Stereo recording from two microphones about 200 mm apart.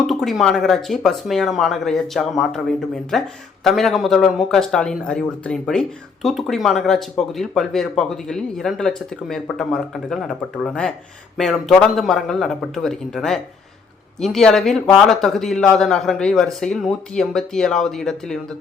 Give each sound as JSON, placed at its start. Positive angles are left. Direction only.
{"t": 0.1, "sound": "speech", "side_deg": 0}